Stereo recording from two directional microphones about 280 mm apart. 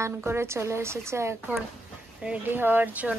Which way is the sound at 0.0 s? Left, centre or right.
Centre.